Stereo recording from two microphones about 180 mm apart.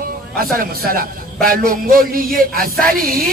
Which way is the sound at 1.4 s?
55° right (ahead or behind).